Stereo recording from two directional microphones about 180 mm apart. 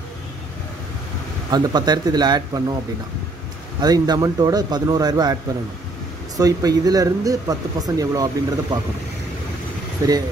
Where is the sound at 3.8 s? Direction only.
20° right (ahead or behind).